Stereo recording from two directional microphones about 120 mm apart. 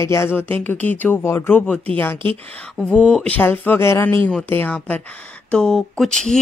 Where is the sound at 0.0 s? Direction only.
25° left (ahead or behind).